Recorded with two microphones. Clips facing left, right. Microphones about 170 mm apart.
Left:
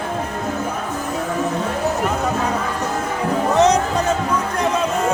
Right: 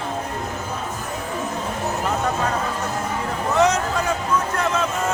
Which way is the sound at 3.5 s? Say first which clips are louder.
Left 3 dB; 20° left (ahead or behind).